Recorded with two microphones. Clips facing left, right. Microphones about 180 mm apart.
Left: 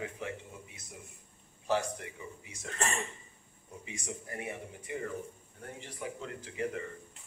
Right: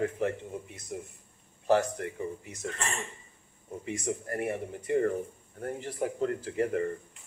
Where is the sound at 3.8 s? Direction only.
55° right (ahead or behind).